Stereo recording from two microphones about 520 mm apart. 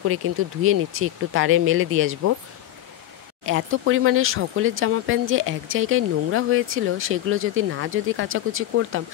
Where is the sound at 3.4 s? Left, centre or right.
Right.